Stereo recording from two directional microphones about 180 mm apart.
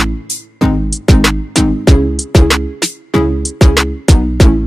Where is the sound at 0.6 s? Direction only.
Centre (ahead or behind).